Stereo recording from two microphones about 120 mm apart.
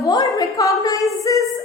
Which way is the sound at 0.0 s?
30° left (ahead or behind).